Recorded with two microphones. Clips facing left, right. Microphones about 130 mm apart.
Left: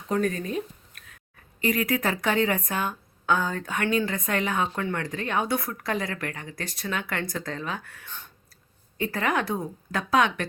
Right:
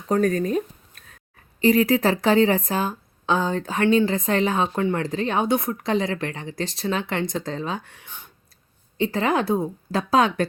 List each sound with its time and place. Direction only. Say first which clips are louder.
0.1 s a woman's voice: right 6 dB; 40° right (ahead or behind); by 8.3 s 15° right (ahead or behind)
9.0 s a woman's voice: right 5 dB; 30° right (ahead or behind)